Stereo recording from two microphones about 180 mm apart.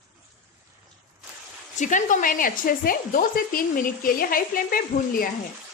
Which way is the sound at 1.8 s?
45° left (ahead or behind).